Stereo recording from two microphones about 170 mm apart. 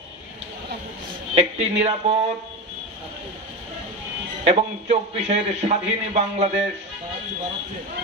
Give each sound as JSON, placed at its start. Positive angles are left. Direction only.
{"t": 1.3, "sound": "a man's voice", "side_deg": -35}
{"t": 4.5, "sound": "a man's voice", "side_deg": -35}